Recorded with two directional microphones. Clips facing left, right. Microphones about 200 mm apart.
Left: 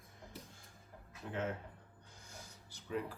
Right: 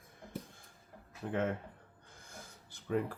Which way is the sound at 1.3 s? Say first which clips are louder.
Right 5 dB; 55° right (ahead or behind).